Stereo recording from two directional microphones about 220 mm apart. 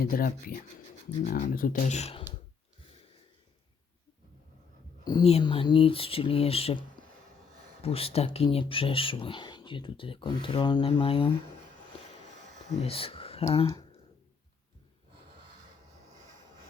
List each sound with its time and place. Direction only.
0.0 s speech: 40° left (ahead or behind)
5.0 s speech: 25° left (ahead or behind)
12.6 s speech: 25° left (ahead or behind)